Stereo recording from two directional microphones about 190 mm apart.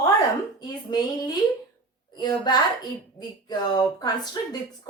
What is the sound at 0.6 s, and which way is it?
A woman's voice, 25° left (ahead or behind).